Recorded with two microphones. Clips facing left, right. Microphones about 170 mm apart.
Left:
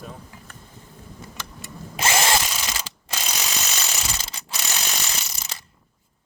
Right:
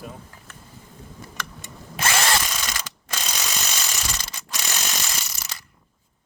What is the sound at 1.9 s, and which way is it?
Drill, 20° left (ahead or behind).